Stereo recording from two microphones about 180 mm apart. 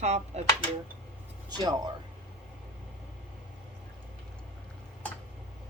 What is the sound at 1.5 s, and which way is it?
Speech, 25° right (ahead or behind).